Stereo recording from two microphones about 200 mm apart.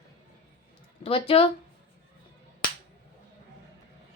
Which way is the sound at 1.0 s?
30° left (ahead or behind).